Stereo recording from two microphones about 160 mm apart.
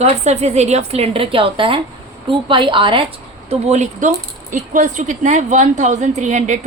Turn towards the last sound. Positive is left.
turn(degrees=-45)  # may be behind; listen again after turning